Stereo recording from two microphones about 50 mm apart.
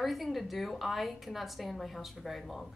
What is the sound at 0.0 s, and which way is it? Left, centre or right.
Speech, centre.